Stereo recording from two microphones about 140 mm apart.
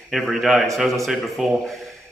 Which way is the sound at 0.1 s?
Centre (ahead or behind).